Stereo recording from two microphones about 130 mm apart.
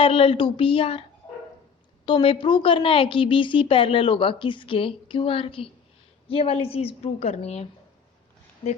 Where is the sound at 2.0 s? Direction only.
40° left (ahead or behind).